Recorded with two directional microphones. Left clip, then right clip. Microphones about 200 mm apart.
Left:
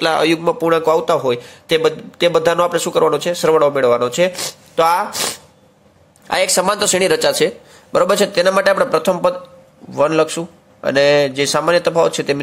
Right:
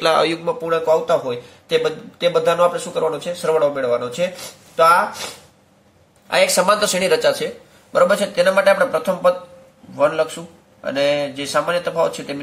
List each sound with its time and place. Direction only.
0.0 s a man's voice: 30° left (ahead or behind)
0.7 s a man's voice: 45° left (ahead or behind)
6.2 s a man's voice: 40° left (ahead or behind)